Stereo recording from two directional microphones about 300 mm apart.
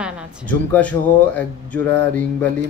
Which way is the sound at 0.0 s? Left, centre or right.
Centre.